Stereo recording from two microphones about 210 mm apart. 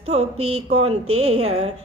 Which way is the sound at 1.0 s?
90° right.